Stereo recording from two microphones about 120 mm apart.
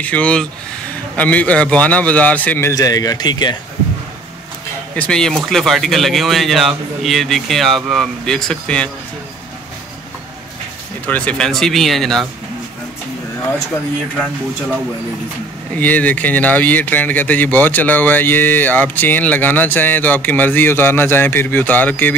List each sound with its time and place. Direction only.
0.0 s speech: 10° left (ahead or behind)
2.7 s speech: 30° left (ahead or behind)
4.9 s speech: 5° left (ahead or behind)
11.1 s speech: 10° left (ahead or behind)
15.7 s speech: 15° left (ahead or behind)